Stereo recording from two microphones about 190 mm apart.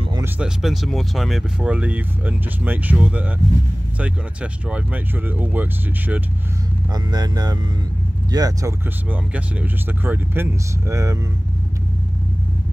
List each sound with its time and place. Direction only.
0.2 s speech: 5° right (ahead or behind)
6.9 s speech: 20° right (ahead or behind)